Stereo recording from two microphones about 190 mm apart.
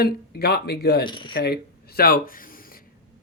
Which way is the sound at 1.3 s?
55° left (ahead or behind).